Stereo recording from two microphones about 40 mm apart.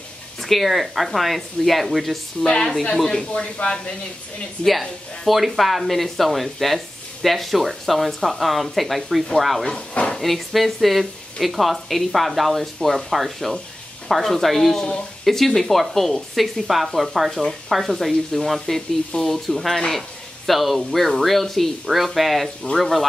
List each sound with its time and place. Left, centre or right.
0.4 s speech: centre
2.4 s speech: centre
3.3 s speech: left
4.6 s speech: centre
9.7 s speech: centre
10.1 s speech: centre
17.3 s speech: centre
17.6 s speech: centre